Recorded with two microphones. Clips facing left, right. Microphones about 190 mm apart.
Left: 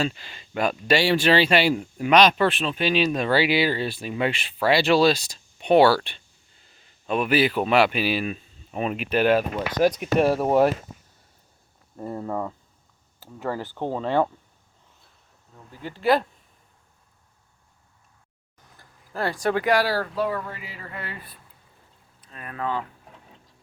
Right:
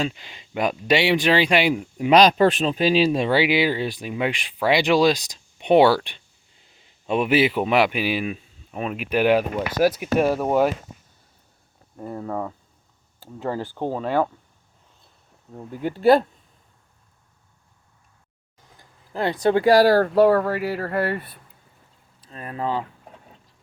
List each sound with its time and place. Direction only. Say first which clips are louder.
0.0 s speech: even; 15° right (ahead or behind)
2.0 s speech: right 3 dB; 35° right (ahead or behind); by 8.4 s 10° right (ahead or behind)
8.7 s speech: left 1 dB; centre (ahead or behind)
9.0 s speech: right 2 dB; 10° right (ahead or behind)
11.9 s speech: even; centre (ahead or behind)
13.1 s speech: right 2 dB; 15° right (ahead or behind)
15.5 s speech: right 10 dB; 50° right (ahead or behind)
18.8 s speech: right 3 dB; 20° right (ahead or behind); by 20.1 s 45° right (ahead or behind)
20.1 s speech: right 11 dB; 70° right (ahead or behind)
22.3 s speech: right 3 dB; 30° right (ahead or behind)